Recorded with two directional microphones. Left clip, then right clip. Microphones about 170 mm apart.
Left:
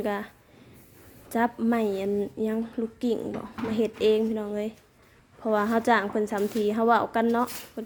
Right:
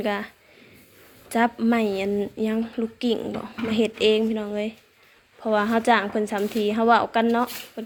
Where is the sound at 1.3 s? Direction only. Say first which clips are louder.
Right 4 dB; 10° left (ahead or behind).